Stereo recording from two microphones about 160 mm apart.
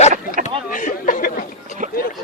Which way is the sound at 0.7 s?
55° left (ahead or behind).